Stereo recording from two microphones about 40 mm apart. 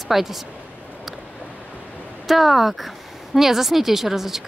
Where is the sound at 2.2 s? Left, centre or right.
Centre.